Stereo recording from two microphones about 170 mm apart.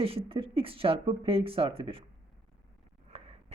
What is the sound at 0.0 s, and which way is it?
Speech, 35° right (ahead or behind).